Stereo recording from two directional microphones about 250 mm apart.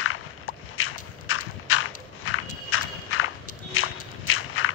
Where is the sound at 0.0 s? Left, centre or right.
Left.